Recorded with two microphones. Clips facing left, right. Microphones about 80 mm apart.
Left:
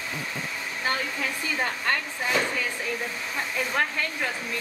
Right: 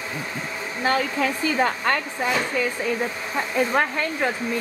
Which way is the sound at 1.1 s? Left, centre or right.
Right.